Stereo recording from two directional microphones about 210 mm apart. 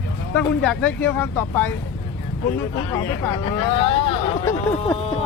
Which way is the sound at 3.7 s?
25° left (ahead or behind).